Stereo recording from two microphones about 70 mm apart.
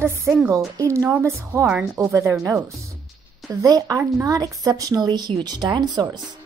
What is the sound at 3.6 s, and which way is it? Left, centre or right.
A woman's voice, right.